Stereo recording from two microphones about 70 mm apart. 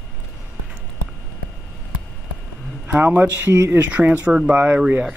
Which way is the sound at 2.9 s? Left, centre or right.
Right.